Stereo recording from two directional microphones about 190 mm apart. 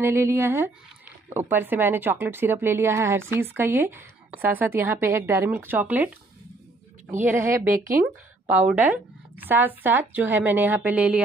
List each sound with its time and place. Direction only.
0.0 s speech: 15° right (ahead or behind)
7.2 s speech: 10° right (ahead or behind)